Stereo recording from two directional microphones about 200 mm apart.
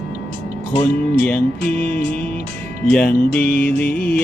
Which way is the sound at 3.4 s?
50° left (ahead or behind).